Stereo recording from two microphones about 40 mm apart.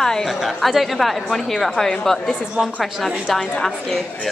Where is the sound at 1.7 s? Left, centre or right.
Centre.